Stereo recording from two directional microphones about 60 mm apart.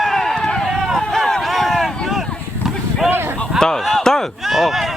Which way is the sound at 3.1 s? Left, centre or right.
Right.